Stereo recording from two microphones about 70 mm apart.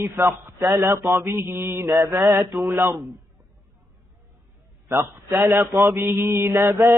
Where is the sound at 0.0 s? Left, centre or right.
Right.